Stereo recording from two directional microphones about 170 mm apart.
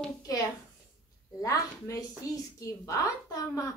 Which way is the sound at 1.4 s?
20° left (ahead or behind).